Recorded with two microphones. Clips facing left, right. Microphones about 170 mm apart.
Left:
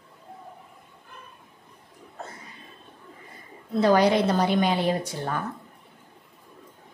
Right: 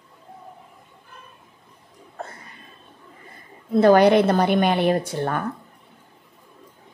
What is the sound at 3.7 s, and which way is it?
Speech, 55° right (ahead or behind).